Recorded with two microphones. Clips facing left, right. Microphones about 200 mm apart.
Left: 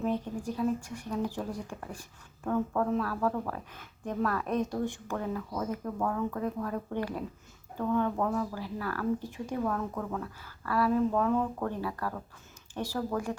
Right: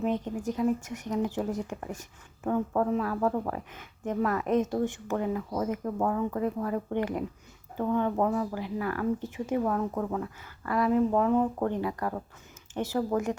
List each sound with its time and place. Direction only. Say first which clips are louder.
0.0 s speech: right 2 dB; 20° right (ahead or behind)